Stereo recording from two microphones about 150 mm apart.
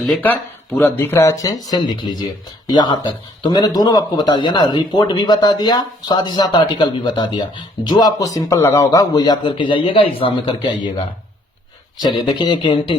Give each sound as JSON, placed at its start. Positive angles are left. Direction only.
{"t": 0.0, "sound": "speech", "side_deg": 0}
{"t": 0.8, "sound": "speech", "side_deg": 15}